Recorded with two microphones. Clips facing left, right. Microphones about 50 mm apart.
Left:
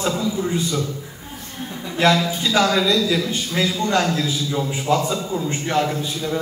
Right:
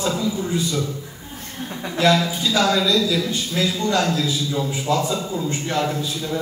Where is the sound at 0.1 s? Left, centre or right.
Left.